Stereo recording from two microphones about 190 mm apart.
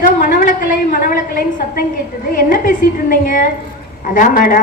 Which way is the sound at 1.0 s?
50° left (ahead or behind).